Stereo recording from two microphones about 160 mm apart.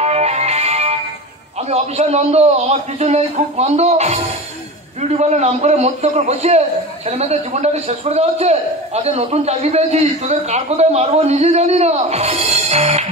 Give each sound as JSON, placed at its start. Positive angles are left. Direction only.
{"t": 0.0, "sound": "music", "side_deg": -40}
{"t": 1.7, "sound": "a man's voice", "side_deg": -40}